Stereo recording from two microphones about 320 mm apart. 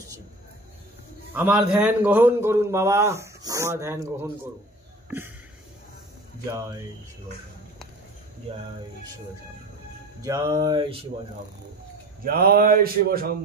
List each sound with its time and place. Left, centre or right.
1.3 s a man's voice: centre
10.2 s a man's voice: centre
12.3 s a sound: right